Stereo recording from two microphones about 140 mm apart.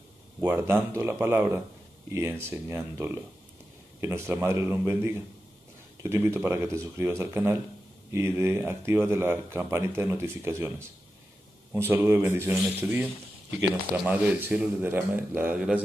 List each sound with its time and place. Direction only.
0.4 s speech: 15° right (ahead or behind)
11.7 s speech: 15° right (ahead or behind)
14.0 s speech: 10° right (ahead or behind)